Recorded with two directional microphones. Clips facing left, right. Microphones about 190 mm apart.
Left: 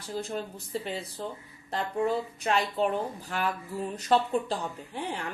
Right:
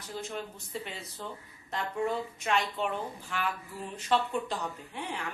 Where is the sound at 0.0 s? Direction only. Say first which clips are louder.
Left 4 dB; 35° left (ahead or behind).